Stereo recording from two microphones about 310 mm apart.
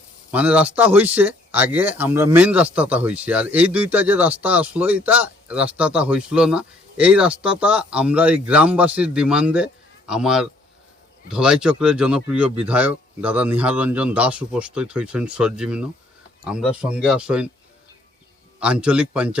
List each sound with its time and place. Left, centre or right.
0.3 s speech: centre
18.6 s speech: centre